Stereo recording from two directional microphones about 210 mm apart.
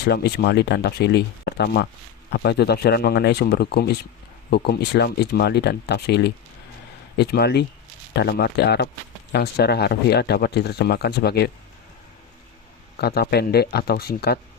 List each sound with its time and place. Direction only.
0.0 s speech: 50° left (ahead or behind)
13.0 s speech: 50° left (ahead or behind)